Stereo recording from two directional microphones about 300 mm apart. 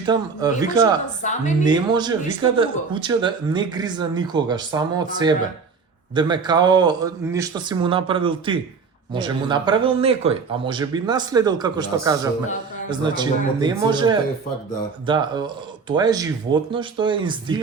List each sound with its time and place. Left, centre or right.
0.0 s speech: centre
1.2 s a woman's voice: left
1.6 s speech: centre